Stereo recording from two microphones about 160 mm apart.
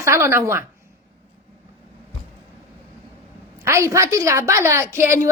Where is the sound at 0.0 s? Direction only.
20° right (ahead or behind).